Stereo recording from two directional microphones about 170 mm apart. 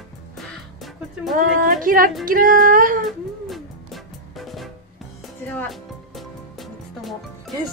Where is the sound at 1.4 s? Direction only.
55° right (ahead or behind).